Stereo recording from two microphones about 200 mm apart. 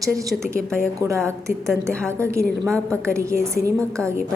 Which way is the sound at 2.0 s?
15° right (ahead or behind).